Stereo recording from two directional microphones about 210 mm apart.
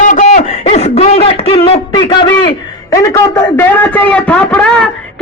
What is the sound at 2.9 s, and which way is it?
A man's voice, 15° left (ahead or behind).